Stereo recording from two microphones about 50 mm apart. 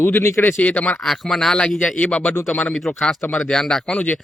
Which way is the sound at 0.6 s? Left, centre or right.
Left.